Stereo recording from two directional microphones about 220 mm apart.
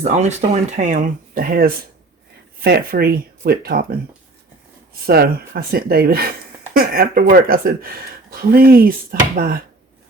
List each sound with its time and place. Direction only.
0.0 s speech: 30° right (ahead or behind)
5.0 s speech: 45° right (ahead or behind)